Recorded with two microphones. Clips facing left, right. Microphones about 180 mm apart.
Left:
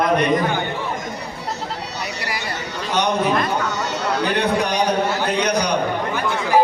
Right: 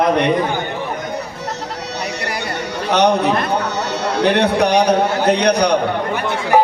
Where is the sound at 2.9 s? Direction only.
70° right (ahead or behind).